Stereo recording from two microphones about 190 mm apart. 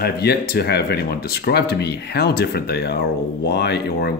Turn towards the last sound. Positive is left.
turn(degrees=55)  # may be behind; listen again after turning